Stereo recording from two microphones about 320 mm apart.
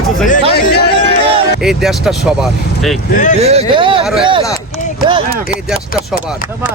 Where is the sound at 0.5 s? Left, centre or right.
Left.